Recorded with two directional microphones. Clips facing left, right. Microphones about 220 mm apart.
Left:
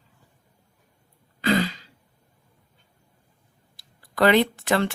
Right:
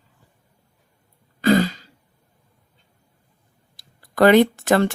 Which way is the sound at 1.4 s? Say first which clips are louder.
Right 6 dB; 45° right (ahead or behind).